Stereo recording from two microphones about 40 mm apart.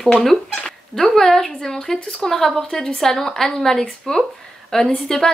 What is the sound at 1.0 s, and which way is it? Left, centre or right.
A woman's voice, centre.